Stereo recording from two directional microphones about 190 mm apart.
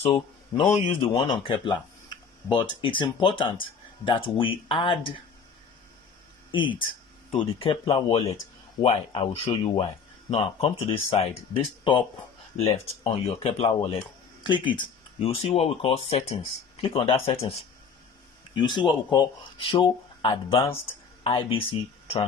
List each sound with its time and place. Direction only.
0.0 s speech: 25° left (ahead or behind)
7.2 s speech: 30° left (ahead or behind)